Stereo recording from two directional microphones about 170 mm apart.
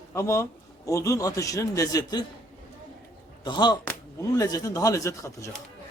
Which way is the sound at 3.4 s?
25° left (ahead or behind).